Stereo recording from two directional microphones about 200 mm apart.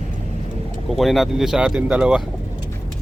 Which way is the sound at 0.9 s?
Centre (ahead or behind).